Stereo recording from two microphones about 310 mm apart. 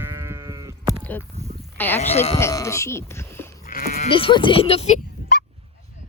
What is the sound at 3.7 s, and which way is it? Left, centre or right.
Sheep, left.